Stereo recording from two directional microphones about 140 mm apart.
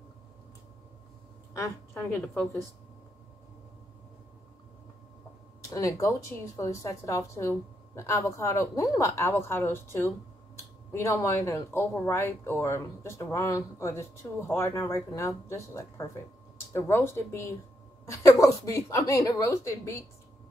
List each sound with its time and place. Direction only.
1.5 s a woman's voice: 20° left (ahead or behind)
5.7 s speech: 25° left (ahead or behind)